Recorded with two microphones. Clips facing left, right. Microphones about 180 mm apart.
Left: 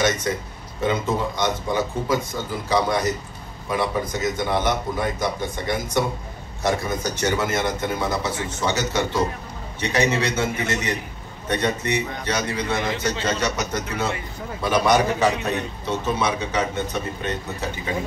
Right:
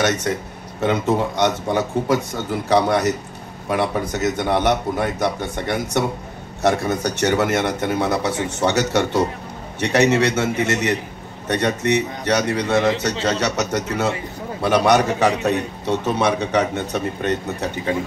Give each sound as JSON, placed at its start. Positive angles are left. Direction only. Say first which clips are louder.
{"t": 0.0, "sound": "a man's voice", "louder": "right 2 dB", "side_deg": -70}